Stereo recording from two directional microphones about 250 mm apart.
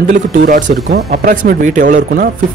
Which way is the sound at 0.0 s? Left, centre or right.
Right.